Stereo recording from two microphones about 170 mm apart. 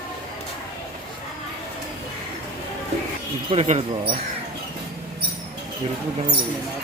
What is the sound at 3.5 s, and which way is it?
Speech, 35° right (ahead or behind).